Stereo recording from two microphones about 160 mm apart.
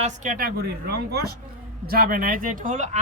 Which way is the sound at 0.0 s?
60° right (ahead or behind).